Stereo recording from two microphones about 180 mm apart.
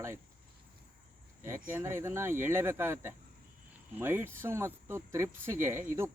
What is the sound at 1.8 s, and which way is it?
Speech, 15° right (ahead or behind).